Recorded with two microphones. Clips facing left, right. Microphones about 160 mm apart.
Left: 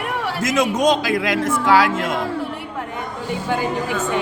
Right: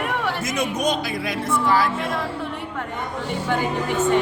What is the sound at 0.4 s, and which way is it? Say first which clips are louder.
A man's voice: left 9 dB; 90° left.